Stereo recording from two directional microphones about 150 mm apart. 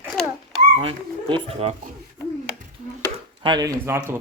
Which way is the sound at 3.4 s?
30° right (ahead or behind).